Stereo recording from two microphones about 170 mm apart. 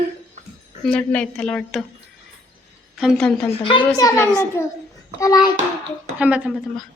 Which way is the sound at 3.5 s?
30° left (ahead or behind).